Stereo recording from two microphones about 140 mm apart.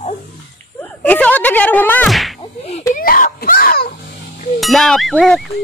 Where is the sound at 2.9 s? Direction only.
80° left.